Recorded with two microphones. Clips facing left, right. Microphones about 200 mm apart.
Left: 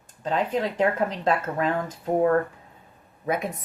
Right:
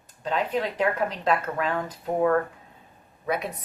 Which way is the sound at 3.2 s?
50° left (ahead or behind).